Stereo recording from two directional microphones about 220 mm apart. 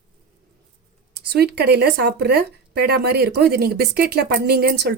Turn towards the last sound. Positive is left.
turn(degrees=-50)  # may be behind; listen again after turning